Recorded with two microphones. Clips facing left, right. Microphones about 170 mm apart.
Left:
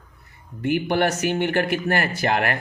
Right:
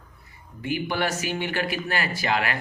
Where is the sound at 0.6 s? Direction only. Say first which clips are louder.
Left 6 dB; 60° left (ahead or behind).